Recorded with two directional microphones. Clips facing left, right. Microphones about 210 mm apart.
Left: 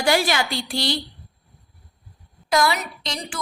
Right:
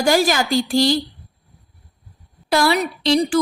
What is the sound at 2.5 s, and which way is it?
Speech, 30° right (ahead or behind).